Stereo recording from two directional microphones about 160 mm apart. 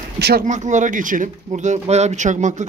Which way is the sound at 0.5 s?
50° right (ahead or behind).